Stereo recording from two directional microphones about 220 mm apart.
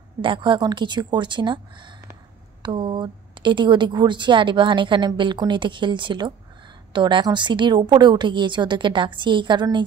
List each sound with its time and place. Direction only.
0.2 s a woman's voice: 20° right (ahead or behind)